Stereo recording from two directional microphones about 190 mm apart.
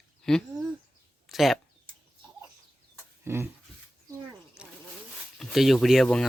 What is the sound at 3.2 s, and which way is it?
Speech, 10° right (ahead or behind).